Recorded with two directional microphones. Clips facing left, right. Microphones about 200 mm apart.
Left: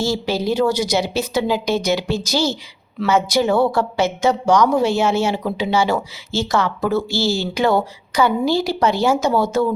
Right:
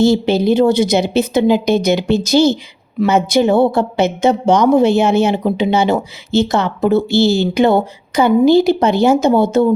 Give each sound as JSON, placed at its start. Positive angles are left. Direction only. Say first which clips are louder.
{"t": 0.0, "sound": "a woman's voice", "louder": "right 8 dB", "side_deg": -20}